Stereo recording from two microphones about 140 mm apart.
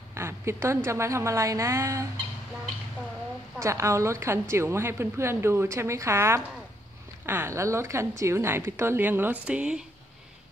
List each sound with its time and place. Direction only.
0.1 s a woman's voice: 20° right (ahead or behind)
3.5 s a woman's voice: 20° right (ahead or behind)